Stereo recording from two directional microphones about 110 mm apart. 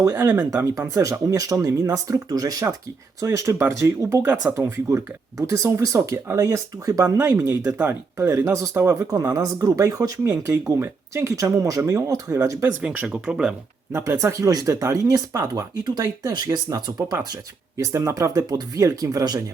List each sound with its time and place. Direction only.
0.0 s speech: 25° right (ahead or behind)
12.8 s speech: 10° right (ahead or behind)
13.9 s speech: 25° right (ahead or behind)